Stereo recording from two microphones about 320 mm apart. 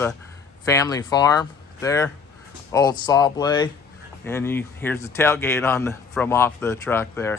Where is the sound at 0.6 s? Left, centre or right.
Centre.